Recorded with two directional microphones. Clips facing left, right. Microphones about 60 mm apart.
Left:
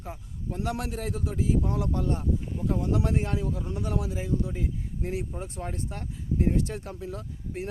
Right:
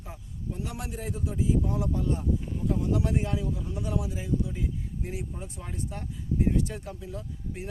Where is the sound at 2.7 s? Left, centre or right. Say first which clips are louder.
Left 1 dB; left.